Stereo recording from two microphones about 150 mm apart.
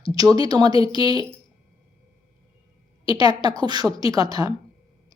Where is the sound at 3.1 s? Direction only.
25° right (ahead or behind).